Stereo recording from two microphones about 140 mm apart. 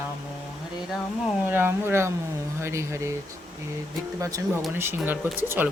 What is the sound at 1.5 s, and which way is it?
Speech, 15° right (ahead or behind).